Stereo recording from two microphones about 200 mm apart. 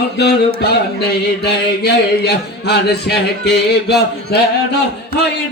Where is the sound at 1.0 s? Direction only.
55° left (ahead or behind).